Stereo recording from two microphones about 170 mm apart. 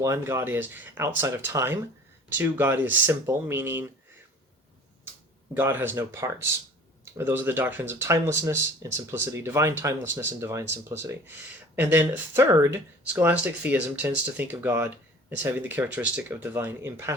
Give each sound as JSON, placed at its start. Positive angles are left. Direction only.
{"t": 0.0, "sound": "speech", "side_deg": -15}
{"t": 5.5, "sound": "speech", "side_deg": -15}